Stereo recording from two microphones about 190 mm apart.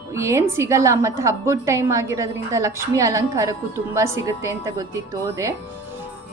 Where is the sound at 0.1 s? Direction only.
15° right (ahead or behind).